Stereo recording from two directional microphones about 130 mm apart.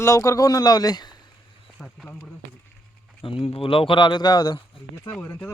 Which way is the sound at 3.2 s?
45° left (ahead or behind).